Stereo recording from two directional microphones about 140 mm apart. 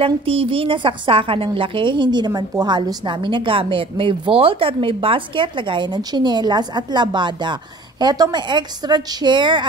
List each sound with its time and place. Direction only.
0.0 s a woman's voice: 40° right (ahead or behind)